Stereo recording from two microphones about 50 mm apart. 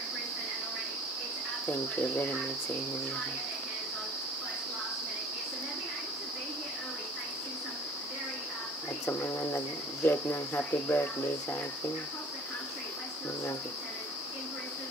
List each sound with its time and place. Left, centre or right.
1.7 s cricket: left
9.0 s cricket: left